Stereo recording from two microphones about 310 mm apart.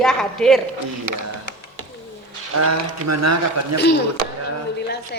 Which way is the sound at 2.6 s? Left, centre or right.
Right.